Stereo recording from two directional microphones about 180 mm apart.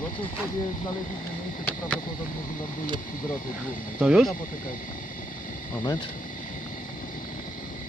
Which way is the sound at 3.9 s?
5° right (ahead or behind).